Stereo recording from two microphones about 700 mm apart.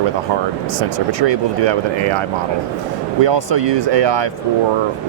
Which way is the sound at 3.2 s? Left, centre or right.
Right.